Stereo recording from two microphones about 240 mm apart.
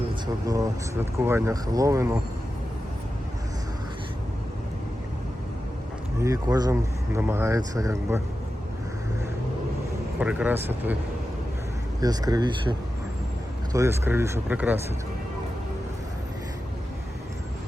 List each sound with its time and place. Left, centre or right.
0.4 s speech: centre
6.1 s speech: centre
10.2 s speech: centre
11.9 s speech: centre
13.7 s speech: centre